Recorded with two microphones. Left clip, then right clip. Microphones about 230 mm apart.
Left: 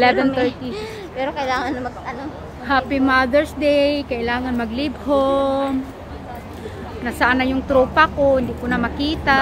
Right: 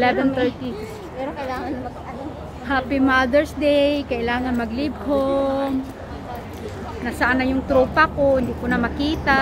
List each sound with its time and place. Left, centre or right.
0.0 s speech: centre
2.7 s speech: centre
7.1 s speech: centre